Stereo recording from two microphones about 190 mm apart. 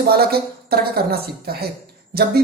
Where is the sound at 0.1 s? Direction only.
55° right (ahead or behind).